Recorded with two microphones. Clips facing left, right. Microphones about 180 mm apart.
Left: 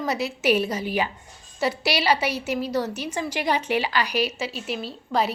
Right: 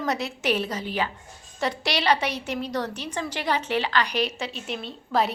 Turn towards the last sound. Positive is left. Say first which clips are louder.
# even
turn(degrees=0)  # may be behind; listen again after turning